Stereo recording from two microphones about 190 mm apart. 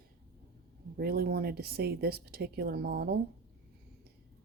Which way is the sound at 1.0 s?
55° right (ahead or behind).